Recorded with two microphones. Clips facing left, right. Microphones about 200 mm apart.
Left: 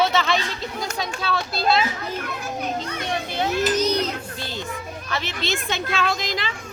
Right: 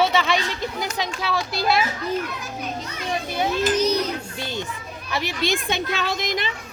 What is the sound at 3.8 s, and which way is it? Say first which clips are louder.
Music: right 1 dB; 15° right (ahead or behind).